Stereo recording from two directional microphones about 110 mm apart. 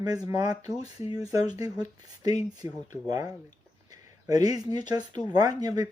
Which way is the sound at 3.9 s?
35° right (ahead or behind).